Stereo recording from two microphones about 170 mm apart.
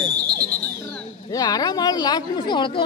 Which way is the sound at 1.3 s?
20° left (ahead or behind).